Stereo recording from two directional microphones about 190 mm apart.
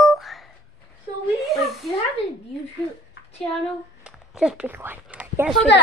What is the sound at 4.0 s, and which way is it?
Speech, 5° right (ahead or behind).